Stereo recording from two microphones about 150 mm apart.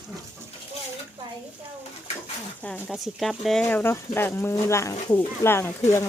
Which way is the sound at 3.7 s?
15° left (ahead or behind).